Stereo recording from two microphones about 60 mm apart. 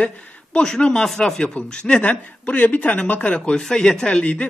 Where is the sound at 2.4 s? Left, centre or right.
Left.